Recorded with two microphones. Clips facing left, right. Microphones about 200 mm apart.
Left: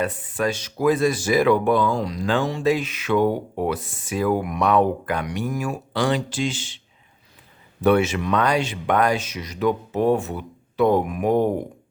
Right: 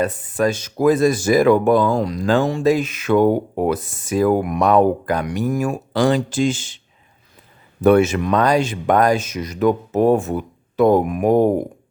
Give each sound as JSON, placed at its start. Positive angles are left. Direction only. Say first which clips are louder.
{"t": 0.0, "sound": "speech", "louder": "right 5 dB", "side_deg": -45}
{"t": 7.8, "sound": "speech", "louder": "right 5 dB", "side_deg": -45}